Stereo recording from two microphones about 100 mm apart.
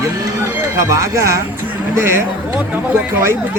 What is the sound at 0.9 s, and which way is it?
Speech, 30° right (ahead or behind).